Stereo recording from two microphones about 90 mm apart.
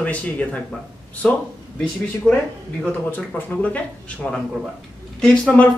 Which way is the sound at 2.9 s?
20° left (ahead or behind).